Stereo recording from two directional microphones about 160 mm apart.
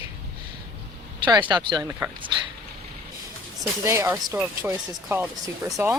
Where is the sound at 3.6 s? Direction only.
20° right (ahead or behind).